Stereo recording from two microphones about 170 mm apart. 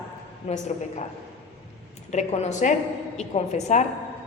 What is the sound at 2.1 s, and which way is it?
A woman's voice, 45° left (ahead or behind).